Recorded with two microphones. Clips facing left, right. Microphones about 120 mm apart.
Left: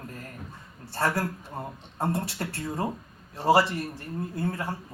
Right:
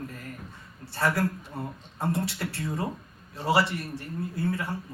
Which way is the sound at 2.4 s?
35° left (ahead or behind).